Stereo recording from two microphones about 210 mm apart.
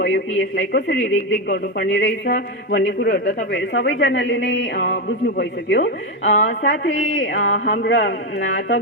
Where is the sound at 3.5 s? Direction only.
60° left (ahead or behind).